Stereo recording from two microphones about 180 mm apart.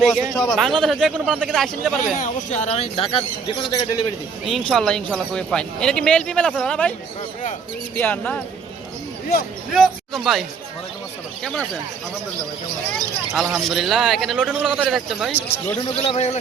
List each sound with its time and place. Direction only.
0.0 s speech: 5° left (ahead or behind)
2.1 s speech: 45° left (ahead or behind); by 3.8 s 25° left (ahead or behind)
4.4 s speech: centre (ahead or behind)
7.9 s speech: 10° left (ahead or behind)
9.7 s speech: centre (ahead or behind)
13.3 s speech: centre (ahead or behind)
15.3 s speech: 10° left (ahead or behind)
16.0 s speech: 35° left (ahead or behind)